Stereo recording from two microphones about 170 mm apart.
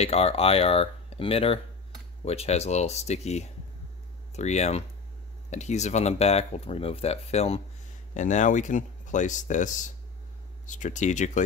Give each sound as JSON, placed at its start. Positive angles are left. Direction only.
{"t": 0.0, "sound": "speech", "side_deg": 35}